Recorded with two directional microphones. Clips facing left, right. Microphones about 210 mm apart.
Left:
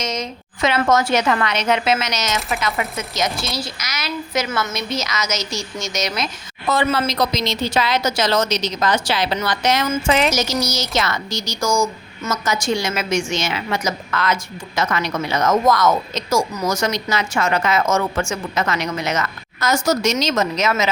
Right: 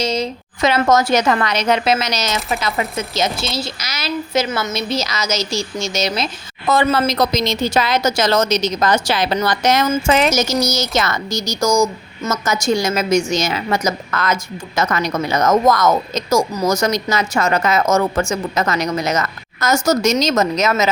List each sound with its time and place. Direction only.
0.0 s a woman's voice: 30° right (ahead or behind)
6.7 s a woman's voice: 45° right (ahead or behind)